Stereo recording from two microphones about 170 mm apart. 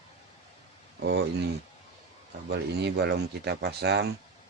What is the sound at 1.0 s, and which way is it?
Speech, 75° right (ahead or behind).